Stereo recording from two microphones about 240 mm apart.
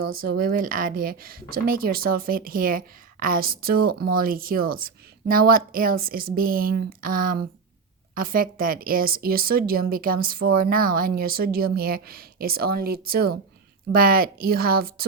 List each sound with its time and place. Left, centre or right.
0.2 s a woman's voice: right